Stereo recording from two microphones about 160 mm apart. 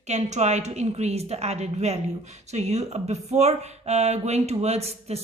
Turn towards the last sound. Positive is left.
turn(degrees=-40)  # may be behind; listen again after turning